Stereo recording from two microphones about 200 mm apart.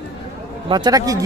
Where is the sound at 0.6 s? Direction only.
20° right (ahead or behind).